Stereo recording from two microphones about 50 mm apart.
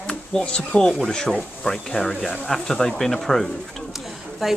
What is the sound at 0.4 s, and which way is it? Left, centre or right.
A man's voice, left.